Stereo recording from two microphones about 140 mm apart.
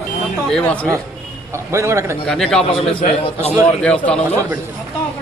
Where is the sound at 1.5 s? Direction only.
20° right (ahead or behind).